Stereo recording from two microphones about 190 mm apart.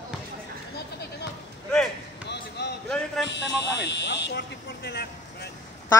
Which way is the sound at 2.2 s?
65° left (ahead or behind).